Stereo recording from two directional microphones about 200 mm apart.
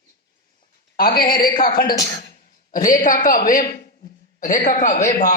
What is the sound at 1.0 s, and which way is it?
Speech, 50° left (ahead or behind).